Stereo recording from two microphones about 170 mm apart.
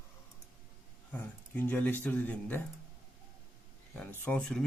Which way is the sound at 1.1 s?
10° left (ahead or behind).